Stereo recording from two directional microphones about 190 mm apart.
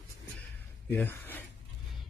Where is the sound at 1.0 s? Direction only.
10° left (ahead or behind).